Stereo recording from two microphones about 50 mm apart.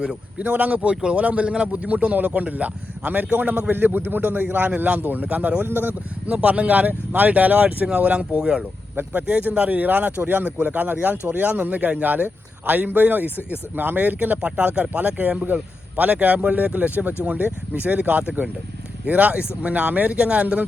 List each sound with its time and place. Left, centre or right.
0.3 s a man's voice: right
8.4 s speech: centre
9.2 s a man's voice: right